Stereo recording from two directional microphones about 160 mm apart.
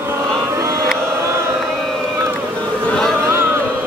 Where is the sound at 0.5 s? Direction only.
20° right (ahead or behind).